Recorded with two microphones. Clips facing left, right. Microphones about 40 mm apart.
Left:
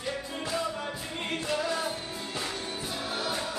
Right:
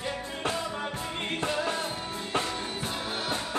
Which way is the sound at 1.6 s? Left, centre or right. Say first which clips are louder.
Even; right.